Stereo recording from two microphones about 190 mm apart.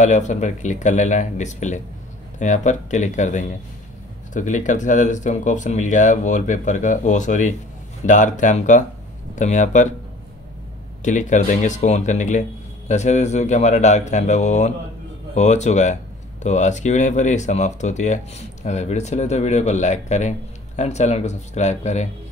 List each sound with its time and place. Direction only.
0.0 s speech: 40° left (ahead or behind)
11.0 s speech: 40° left (ahead or behind)